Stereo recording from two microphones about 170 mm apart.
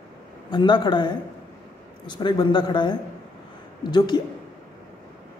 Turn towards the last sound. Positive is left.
turn(degrees=25)  # may be behind; listen again after turning